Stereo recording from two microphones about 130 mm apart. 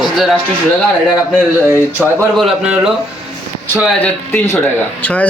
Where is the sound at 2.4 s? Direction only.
Centre (ahead or behind).